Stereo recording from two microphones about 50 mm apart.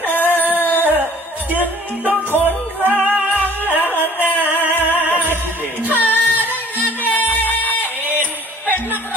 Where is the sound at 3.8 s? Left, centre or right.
Left.